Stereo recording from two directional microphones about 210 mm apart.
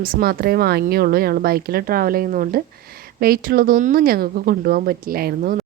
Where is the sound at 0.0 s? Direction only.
45° right (ahead or behind).